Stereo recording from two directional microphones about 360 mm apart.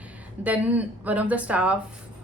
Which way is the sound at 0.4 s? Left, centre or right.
Centre.